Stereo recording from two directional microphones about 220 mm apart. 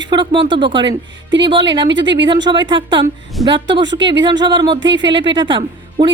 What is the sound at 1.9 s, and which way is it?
Speech, 55° right (ahead or behind).